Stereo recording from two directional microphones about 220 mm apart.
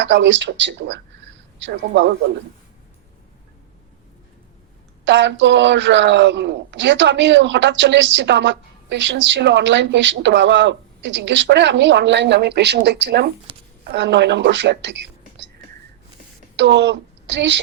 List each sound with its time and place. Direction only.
0.0 s a woman's voice: 55° right (ahead or behind)
5.0 s a woman's voice: 55° right (ahead or behind)
16.6 s a woman's voice: 55° right (ahead or behind)